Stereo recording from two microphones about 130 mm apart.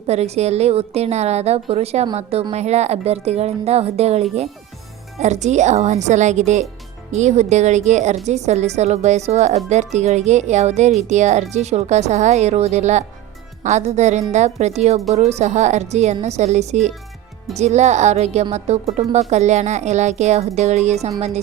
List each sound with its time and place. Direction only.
0.1 s speech: 55° right (ahead or behind)